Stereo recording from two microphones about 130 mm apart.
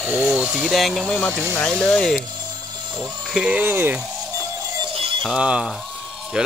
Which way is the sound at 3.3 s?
10° right (ahead or behind).